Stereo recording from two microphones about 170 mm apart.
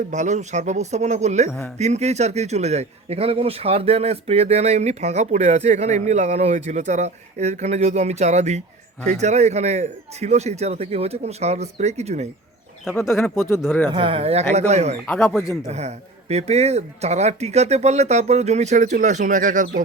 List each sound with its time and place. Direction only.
0.1 s a man's voice: 45° right (ahead or behind)
13.1 s speech: 15° left (ahead or behind)
13.9 s a man's voice: 30° right (ahead or behind); by 19.8 s 50° right (ahead or behind)